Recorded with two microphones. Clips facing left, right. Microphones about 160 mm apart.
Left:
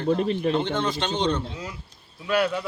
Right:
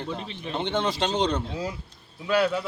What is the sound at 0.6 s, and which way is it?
Speech, 25° right (ahead or behind).